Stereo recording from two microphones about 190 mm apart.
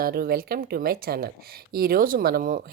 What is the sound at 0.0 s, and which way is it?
Speech, 50° right (ahead or behind).